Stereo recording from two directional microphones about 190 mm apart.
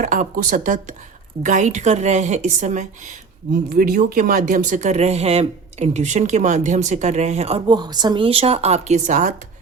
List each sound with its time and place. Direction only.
0.0 s speech: 40° right (ahead or behind)
3.5 s speech: 55° right (ahead or behind)